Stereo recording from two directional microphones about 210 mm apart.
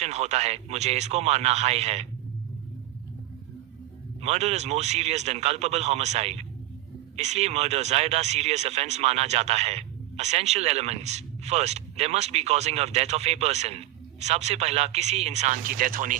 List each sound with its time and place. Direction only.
0.0 s speech: 30° right (ahead or behind)
4.2 s speech: 30° right (ahead or behind)